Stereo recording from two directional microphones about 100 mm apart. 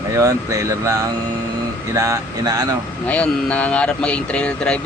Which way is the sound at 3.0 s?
10° left (ahead or behind).